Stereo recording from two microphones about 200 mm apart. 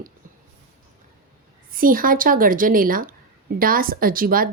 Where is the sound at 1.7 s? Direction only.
45° right (ahead or behind).